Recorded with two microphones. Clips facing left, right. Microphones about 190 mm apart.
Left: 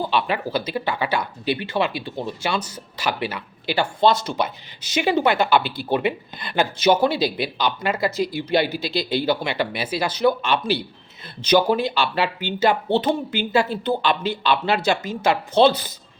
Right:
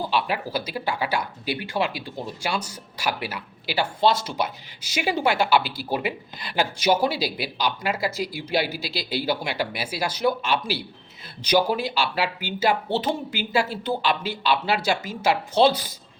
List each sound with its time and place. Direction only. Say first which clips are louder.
0.1 s speech: left 3 dB; 10° right (ahead or behind)
6.4 s speech: left 3 dB; 55° left (ahead or behind)
6.7 s speech: left 4 dB; 10° right (ahead or behind)